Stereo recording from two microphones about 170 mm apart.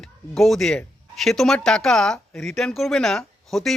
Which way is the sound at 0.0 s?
Centre (ahead or behind).